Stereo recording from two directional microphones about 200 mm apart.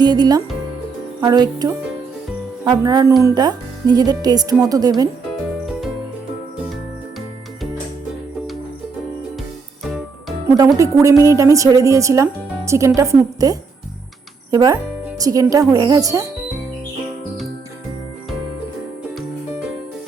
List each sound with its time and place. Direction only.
0.0 s speech: 20° right (ahead or behind)
9.8 s music: centre (ahead or behind)
10.8 s speech: 15° right (ahead or behind)